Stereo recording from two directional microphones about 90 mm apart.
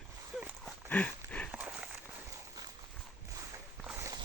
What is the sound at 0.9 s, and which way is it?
Horse, 20° left (ahead or behind).